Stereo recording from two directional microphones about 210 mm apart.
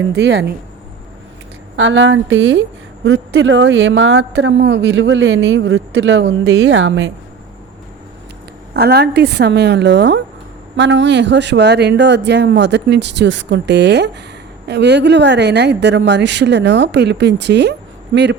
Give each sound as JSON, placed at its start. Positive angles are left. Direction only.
{"t": 0.2, "sound": "a woman's voice", "side_deg": -55}
{"t": 1.7, "sound": "a woman's voice", "side_deg": -60}
{"t": 8.7, "sound": "a woman's voice", "side_deg": -50}